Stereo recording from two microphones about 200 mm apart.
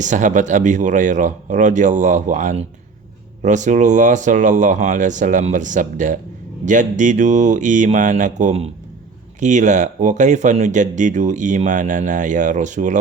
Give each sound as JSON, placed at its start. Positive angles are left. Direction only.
{"t": 0.0, "sound": "speech", "side_deg": -40}